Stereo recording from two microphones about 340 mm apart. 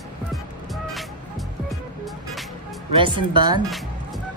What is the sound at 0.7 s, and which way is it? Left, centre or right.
Vehicle, centre.